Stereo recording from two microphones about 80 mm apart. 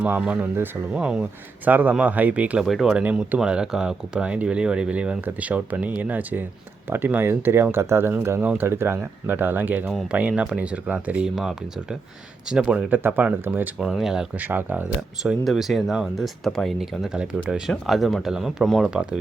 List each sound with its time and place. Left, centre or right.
0.0 s speech: centre
0.5 s speech: right
0.9 s speech: centre
1.6 s speech: right
2.6 s speech: centre
2.9 s speech: centre
13.7 s speech: centre
14.3 s speech: right
15.2 s speech: centre
17.7 s speech: centre